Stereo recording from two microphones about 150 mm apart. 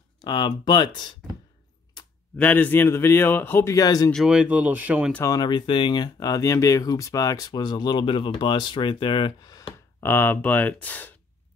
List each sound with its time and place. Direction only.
0.2 s speech: 30° left (ahead or behind)
2.3 s a man's voice: 10° left (ahead or behind)
4.1 s speech: 5° right (ahead or behind)
5.1 s speech: 20° left (ahead or behind)
10.0 s a man's voice: 15° left (ahead or behind)